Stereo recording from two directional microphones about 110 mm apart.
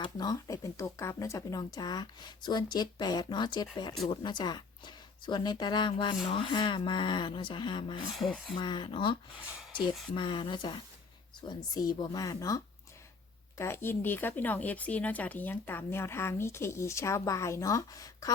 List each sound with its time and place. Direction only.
0.0 s speech: 35° left (ahead or behind)
8.1 s a sound: centre (ahead or behind)
8.5 s speech: 45° left (ahead or behind)
10.2 s speech: 45° left (ahead or behind)